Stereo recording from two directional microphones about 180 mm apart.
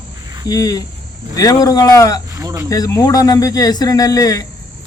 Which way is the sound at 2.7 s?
20° left (ahead or behind).